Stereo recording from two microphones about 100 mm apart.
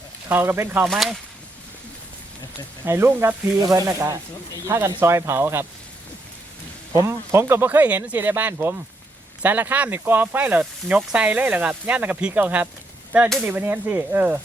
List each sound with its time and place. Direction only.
0.3 s speech: 20° right (ahead or behind)
0.9 s speech: centre (ahead or behind)
2.8 s speech: 25° right (ahead or behind)
6.9 s speech: 25° right (ahead or behind)